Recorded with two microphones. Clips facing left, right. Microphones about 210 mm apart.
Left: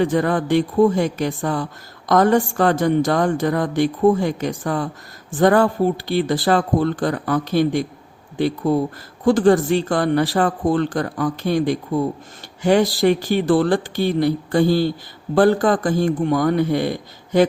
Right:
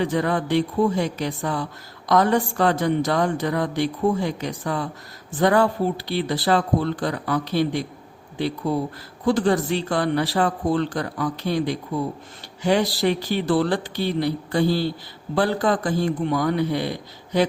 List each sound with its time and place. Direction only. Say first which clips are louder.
0.0 s a woman's voice: left 4 dB; 50° left (ahead or behind)